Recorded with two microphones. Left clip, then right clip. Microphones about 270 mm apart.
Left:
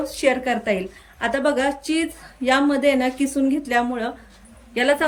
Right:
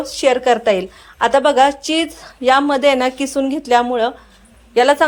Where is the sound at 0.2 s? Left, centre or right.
Centre.